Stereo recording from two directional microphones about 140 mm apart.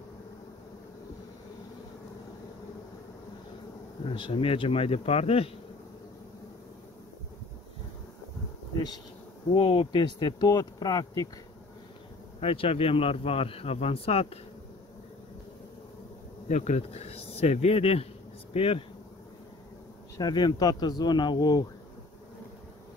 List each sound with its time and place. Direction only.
4.0 s speech: 40° left (ahead or behind)
8.7 s bee: 30° left (ahead or behind)
9.5 s speech: 35° left (ahead or behind)
12.4 s speech: 40° left (ahead or behind)
16.4 s speech: 55° left (ahead or behind)
20.2 s speech: 30° left (ahead or behind)